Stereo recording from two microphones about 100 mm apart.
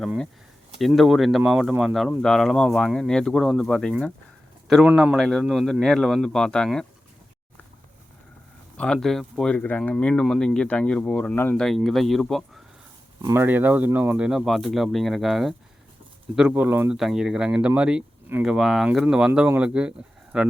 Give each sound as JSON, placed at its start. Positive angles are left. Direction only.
{"t": 0.8, "sound": "speech", "side_deg": 0}
{"t": 4.8, "sound": "speech", "side_deg": -15}
{"t": 5.1, "sound": "speech", "side_deg": 5}
{"t": 8.7, "sound": "speech", "side_deg": 10}
{"t": 13.3, "sound": "speech", "side_deg": -20}
{"t": 14.3, "sound": "speech", "side_deg": -5}
{"t": 16.6, "sound": "speech", "side_deg": -20}
{"t": 16.9, "sound": "speech", "side_deg": -5}